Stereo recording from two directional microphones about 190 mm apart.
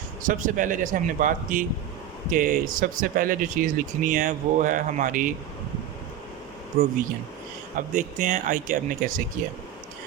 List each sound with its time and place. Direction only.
0.2 s speech: 45° right (ahead or behind)
7.8 s speech: 40° right (ahead or behind)